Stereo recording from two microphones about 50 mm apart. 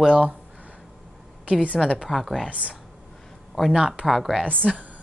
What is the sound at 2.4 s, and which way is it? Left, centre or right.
Speech, right.